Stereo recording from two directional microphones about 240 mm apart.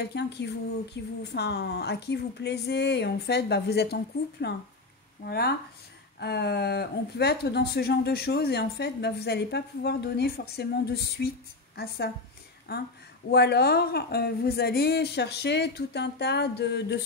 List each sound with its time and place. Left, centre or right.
0.1 s a woman's voice: left